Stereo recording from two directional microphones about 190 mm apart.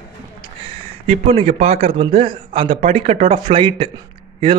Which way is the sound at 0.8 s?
30° right (ahead or behind).